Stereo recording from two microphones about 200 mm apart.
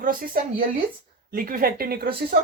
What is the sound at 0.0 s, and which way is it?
Speech, 45° right (ahead or behind).